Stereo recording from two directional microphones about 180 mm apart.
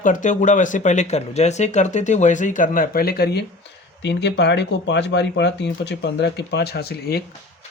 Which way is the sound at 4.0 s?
75° left (ahead or behind).